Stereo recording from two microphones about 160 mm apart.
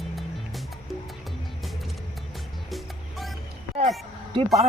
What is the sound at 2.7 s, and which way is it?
Music, centre (ahead or behind).